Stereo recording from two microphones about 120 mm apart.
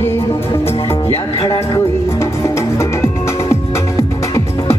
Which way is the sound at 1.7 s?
25° left (ahead or behind).